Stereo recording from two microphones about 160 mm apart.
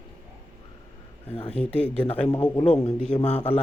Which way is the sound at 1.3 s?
40° left (ahead or behind).